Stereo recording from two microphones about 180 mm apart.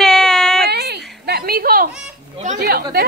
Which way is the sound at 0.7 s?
65° right (ahead or behind).